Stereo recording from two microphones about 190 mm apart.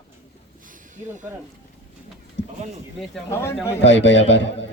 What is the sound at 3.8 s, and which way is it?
Speech, 75° left (ahead or behind).